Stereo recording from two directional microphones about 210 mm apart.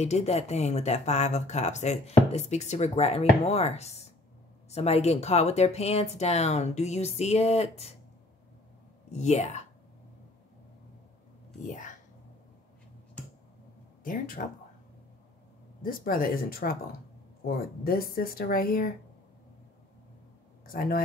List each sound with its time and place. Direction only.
0.0 s speech: 30° left (ahead or behind)
9.1 s speech: 30° left (ahead or behind)
14.0 s speech: 40° left (ahead or behind)
15.8 s speech: 45° left (ahead or behind)
20.6 s speech: 40° left (ahead or behind)